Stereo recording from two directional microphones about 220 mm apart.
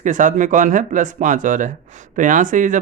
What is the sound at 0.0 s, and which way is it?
Speech, 35° right (ahead or behind).